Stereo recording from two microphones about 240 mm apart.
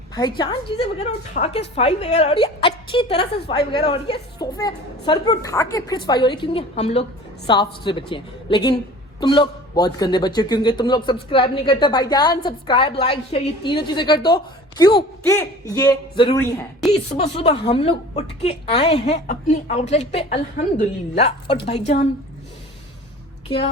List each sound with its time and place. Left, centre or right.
0.1 s a woman's voice: centre
17.2 s a woman's voice: left